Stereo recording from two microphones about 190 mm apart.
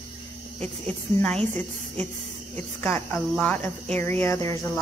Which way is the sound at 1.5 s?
10° left (ahead or behind).